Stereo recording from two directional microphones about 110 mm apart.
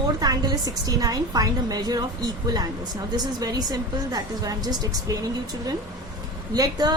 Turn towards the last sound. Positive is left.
turn(degrees=-35)  # may be behind; listen again after turning